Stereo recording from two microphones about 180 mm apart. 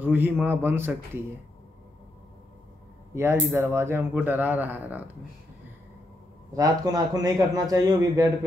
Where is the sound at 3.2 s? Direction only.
15° right (ahead or behind).